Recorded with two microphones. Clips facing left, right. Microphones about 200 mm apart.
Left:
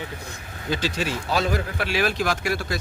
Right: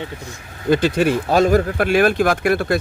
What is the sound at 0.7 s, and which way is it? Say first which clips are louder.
Speech: right 10 dB; 55° right (ahead or behind).